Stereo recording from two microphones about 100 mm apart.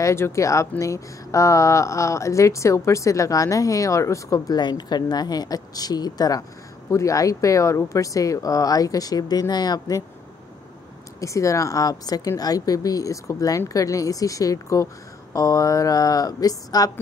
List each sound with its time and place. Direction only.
0.0 s speech: 30° left (ahead or behind)
11.1 s speech: 30° left (ahead or behind)